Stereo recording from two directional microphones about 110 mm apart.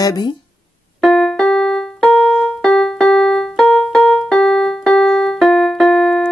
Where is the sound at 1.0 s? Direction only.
5° left (ahead or behind).